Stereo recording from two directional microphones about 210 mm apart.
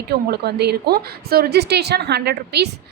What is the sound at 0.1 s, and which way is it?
A woman's voice, 50° right (ahead or behind).